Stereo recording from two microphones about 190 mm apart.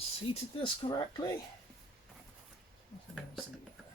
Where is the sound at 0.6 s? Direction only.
25° left (ahead or behind).